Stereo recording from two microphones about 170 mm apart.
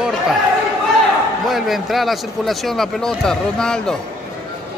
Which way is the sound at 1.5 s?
Centre (ahead or behind).